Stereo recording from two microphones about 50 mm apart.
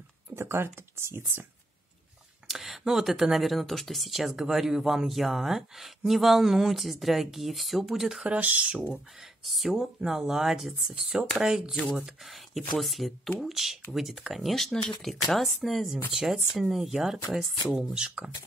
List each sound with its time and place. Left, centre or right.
0.4 s speech: right
2.4 s speech: centre
8.2 s speech: right
8.9 s speech: centre
11.9 s speech: centre
17.9 s speech: centre